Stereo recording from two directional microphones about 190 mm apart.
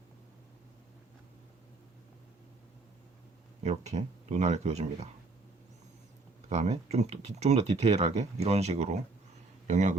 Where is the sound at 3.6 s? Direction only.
35° right (ahead or behind).